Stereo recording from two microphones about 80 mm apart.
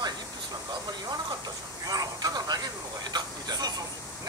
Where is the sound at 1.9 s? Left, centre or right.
Right.